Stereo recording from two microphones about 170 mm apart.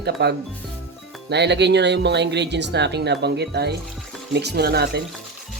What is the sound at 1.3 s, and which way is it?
Speech, 85° right.